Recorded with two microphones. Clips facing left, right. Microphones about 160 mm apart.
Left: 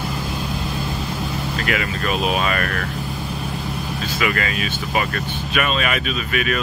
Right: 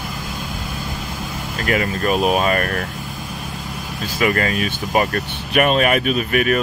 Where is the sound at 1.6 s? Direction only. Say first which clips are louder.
Right 6 dB; 40° right (ahead or behind).